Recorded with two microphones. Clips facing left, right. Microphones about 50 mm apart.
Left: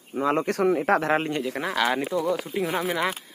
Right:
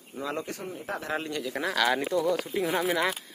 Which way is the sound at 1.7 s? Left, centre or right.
Centre.